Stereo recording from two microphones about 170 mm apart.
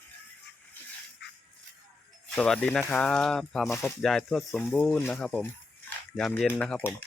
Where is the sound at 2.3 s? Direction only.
5° left (ahead or behind).